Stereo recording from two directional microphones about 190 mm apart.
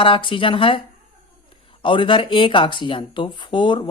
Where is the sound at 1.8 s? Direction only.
25° left (ahead or behind).